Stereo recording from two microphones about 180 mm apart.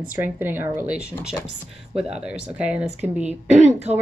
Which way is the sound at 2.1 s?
5° right (ahead or behind).